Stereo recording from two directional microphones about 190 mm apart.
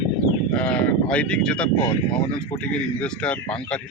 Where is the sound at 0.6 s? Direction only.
5° left (ahead or behind).